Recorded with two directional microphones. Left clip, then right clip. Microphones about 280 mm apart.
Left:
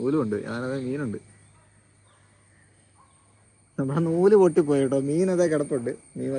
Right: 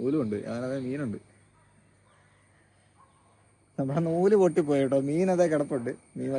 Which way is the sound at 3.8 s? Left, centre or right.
Centre.